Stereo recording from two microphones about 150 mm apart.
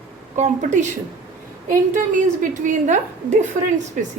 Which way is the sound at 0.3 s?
55° right (ahead or behind).